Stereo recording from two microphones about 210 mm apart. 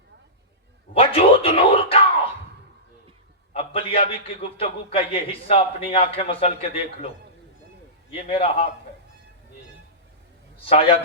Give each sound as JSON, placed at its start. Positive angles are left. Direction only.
{"t": 0.9, "sound": "a sound", "side_deg": 25}
{"t": 3.5, "sound": "a man's voice", "side_deg": 25}
{"t": 8.1, "sound": "a man's voice", "side_deg": 25}
{"t": 10.7, "sound": "a man's voice", "side_deg": 25}